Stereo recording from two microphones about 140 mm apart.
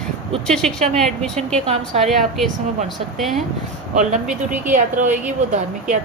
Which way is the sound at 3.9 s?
60° right (ahead or behind).